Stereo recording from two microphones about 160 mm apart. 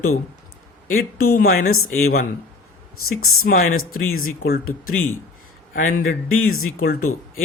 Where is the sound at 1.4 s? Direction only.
70° left (ahead or behind).